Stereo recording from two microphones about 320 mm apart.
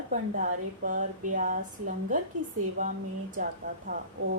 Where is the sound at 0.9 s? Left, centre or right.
Right.